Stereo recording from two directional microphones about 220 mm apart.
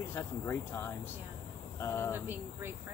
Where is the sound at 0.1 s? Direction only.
10° left (ahead or behind).